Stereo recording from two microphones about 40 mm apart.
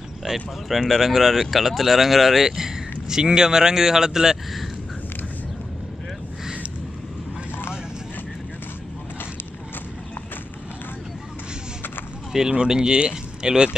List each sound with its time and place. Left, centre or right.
0.2 s speech: centre
12.4 s speech: right